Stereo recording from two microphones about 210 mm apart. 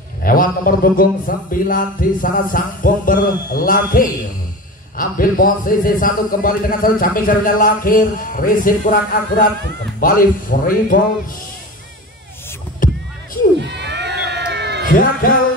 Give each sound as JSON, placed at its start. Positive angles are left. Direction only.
{"t": 0.2, "sound": "a man's voice", "side_deg": 40}
{"t": 9.9, "sound": "a man's voice", "side_deg": 45}
{"t": 12.8, "sound": "rowboat", "side_deg": 40}
{"t": 13.6, "sound": "crowd", "side_deg": -55}
{"t": 14.9, "sound": "a man's voice", "side_deg": 40}